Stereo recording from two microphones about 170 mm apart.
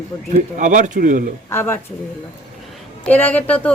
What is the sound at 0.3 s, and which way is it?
Speech, 45° right (ahead or behind).